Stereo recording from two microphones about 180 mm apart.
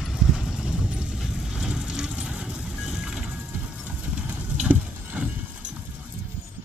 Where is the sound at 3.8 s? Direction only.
10° right (ahead or behind).